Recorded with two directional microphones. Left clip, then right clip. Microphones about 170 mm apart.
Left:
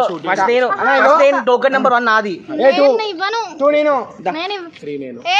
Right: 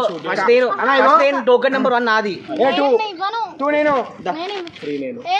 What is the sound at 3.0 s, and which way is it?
Speech, 45° left (ahead or behind).